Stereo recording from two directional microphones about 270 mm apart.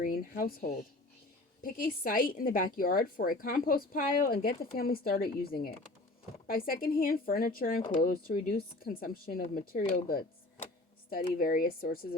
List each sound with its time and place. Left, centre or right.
0.0 s a woman's voice: left